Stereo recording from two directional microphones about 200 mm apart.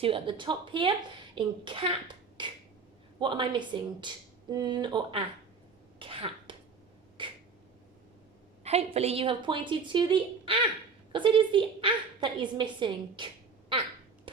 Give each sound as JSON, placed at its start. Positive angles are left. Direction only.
{"t": 0.0, "sound": "a woman's voice", "side_deg": -25}
{"t": 6.0, "sound": "cough", "side_deg": -25}
{"t": 7.2, "sound": "a sound", "side_deg": -25}
{"t": 8.6, "sound": "a woman's voice", "side_deg": -30}